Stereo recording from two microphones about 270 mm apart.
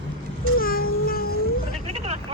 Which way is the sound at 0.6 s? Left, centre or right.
Left.